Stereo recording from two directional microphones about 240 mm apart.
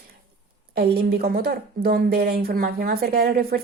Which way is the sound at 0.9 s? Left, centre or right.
Right.